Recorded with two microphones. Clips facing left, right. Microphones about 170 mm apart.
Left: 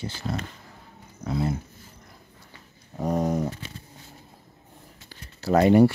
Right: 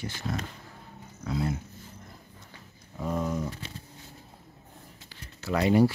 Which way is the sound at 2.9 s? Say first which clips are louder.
Left 5 dB; 40° left (ahead or behind).